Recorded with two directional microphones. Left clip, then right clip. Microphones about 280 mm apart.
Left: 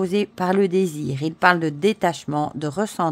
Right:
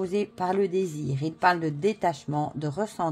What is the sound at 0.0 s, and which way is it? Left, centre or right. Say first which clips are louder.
Speech: left 5 dB; left.